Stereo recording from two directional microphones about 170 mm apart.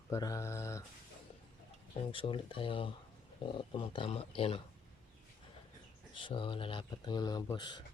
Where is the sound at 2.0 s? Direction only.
30° left (ahead or behind).